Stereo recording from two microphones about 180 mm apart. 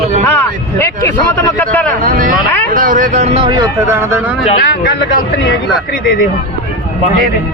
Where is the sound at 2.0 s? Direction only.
50° right (ahead or behind); by 3.5 s 35° right (ahead or behind).